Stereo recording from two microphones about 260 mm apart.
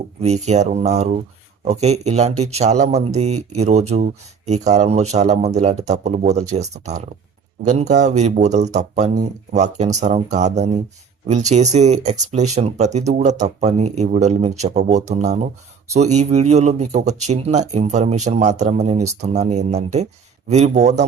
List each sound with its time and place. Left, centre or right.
0.2 s speech: right